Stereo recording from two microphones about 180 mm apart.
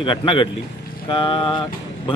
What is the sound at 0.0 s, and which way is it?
Speech, 25° left (ahead or behind).